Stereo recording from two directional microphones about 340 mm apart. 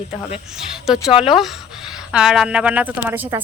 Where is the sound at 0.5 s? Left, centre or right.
Centre.